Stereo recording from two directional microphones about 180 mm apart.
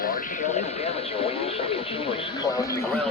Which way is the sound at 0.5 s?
35° left (ahead or behind).